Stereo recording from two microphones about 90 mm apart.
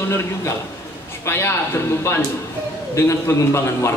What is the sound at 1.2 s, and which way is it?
Speech, 30° left (ahead or behind).